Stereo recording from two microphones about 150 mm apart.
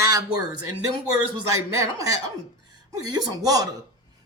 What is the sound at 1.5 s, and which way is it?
Speech, 20° right (ahead or behind).